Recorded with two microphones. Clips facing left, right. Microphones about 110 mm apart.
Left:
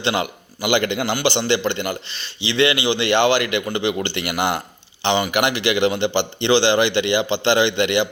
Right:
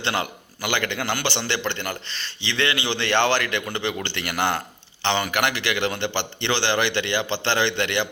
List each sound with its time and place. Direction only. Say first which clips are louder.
0.0 s a man's voice: left 4 dB; 15° left (ahead or behind)